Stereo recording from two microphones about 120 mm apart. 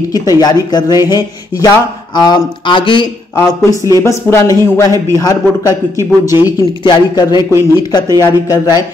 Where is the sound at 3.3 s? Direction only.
25° left (ahead or behind).